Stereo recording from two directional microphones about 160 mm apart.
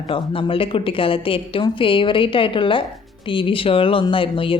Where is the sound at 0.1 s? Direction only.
35° left (ahead or behind).